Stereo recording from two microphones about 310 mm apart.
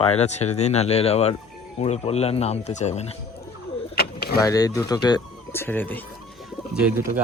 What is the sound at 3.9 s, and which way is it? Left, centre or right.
Vehicle, left.